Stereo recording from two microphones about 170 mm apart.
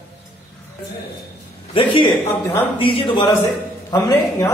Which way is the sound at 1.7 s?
30° left (ahead or behind).